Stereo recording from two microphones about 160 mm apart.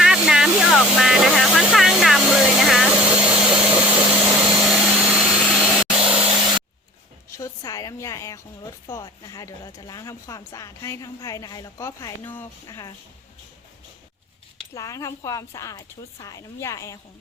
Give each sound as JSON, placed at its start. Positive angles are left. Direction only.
{"t": 0.0, "sound": "vehicle", "side_deg": -5}
{"t": 7.3, "sound": "a sound", "side_deg": 20}
{"t": 8.9, "sound": "speech", "side_deg": 20}
{"t": 12.6, "sound": "speech", "side_deg": 20}
{"t": 14.8, "sound": "speech", "side_deg": 20}